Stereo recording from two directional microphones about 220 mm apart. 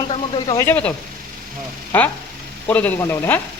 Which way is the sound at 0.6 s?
5° left (ahead or behind).